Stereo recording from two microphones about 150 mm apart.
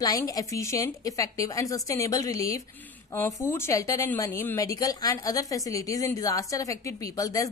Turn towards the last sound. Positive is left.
turn(degrees=25)  # may be behind; listen again after turning